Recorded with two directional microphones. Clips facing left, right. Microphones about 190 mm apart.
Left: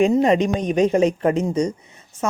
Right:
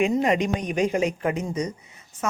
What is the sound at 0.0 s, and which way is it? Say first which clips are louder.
Speech: left 5 dB; 30° left (ahead or behind).